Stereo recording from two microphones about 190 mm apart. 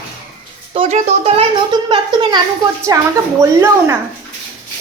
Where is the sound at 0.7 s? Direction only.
35° right (ahead or behind); by 3.9 s 15° right (ahead or behind).